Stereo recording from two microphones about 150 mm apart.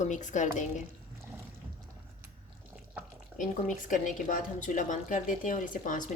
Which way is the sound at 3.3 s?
60° left (ahead or behind).